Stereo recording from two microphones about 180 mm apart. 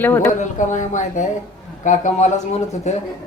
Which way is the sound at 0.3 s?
45° left (ahead or behind).